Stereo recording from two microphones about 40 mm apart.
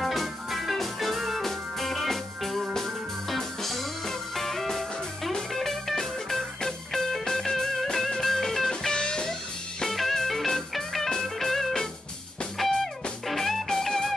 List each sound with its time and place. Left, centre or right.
0.0 s music: centre
8.9 s music: left
9.8 s music: centre